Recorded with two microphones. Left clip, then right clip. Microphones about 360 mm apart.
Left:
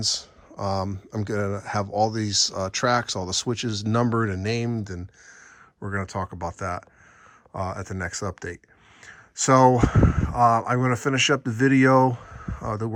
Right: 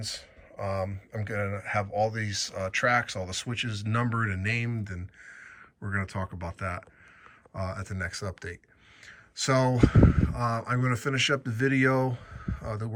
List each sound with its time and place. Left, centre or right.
0.0 s speech: centre
9.0 s speech: centre
12.1 s a sound: centre